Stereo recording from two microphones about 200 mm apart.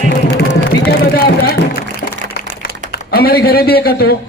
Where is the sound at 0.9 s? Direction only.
50° left (ahead or behind).